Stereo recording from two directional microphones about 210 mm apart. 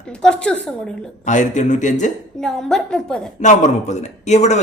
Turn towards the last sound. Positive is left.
turn(degrees=35)  # may be behind; listen again after turning